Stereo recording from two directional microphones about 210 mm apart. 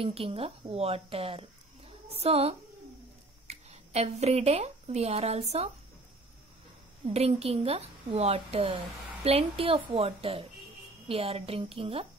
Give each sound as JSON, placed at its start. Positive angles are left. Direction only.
{"t": 0.0, "sound": "a woman's voice", "side_deg": -25}
{"t": 7.2, "sound": "speech", "side_deg": -30}